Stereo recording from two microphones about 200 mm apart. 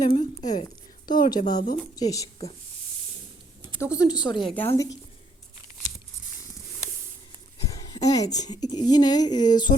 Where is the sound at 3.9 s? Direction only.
20° left (ahead or behind).